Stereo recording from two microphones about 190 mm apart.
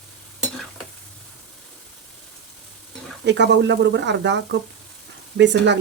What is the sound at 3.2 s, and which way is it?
Speech, 65° right (ahead or behind).